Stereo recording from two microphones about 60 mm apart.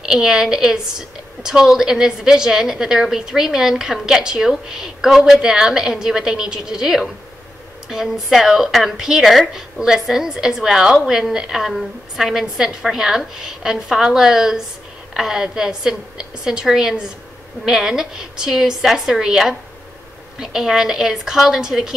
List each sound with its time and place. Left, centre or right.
0.0 s a woman's voice: centre